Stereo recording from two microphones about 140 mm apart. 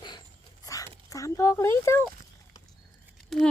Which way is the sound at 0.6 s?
25° left (ahead or behind).